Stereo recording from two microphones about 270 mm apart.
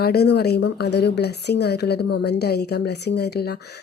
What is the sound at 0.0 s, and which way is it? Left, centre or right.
Speech, left.